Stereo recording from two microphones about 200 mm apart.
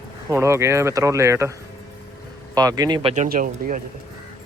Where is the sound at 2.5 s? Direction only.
20° right (ahead or behind).